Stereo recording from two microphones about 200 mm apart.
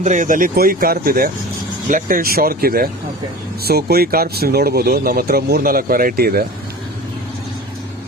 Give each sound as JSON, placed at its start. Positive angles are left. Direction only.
{"t": 0.0, "sound": "speech", "side_deg": -40}